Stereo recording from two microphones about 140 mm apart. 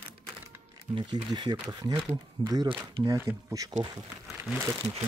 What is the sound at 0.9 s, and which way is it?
Speech, 35° right (ahead or behind).